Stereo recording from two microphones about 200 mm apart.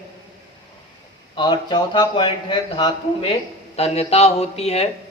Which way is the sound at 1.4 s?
20° left (ahead or behind).